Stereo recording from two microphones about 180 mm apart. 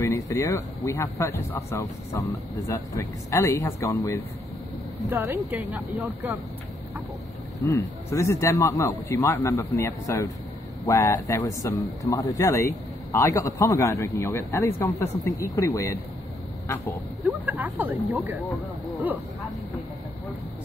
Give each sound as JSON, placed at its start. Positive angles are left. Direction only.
{"t": 0.3, "sound": "a man's voice", "side_deg": 15}
{"t": 5.2, "sound": "speech", "side_deg": -10}
{"t": 8.1, "sound": "a man's voice", "side_deg": 15}
{"t": 17.5, "sound": "speech", "side_deg": -10}